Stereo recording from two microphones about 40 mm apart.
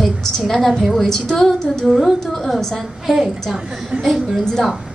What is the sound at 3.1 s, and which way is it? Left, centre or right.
Speech, centre.